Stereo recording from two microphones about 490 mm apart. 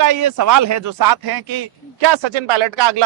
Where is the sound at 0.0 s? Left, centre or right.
Right.